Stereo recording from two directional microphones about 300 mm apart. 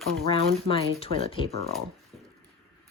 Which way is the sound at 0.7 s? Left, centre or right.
Centre.